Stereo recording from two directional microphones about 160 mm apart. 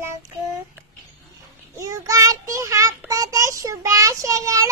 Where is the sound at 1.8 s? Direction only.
20° right (ahead or behind).